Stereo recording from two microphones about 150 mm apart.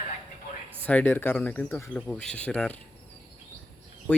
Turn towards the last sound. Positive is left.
turn(degrees=10)  # may be behind; listen again after turning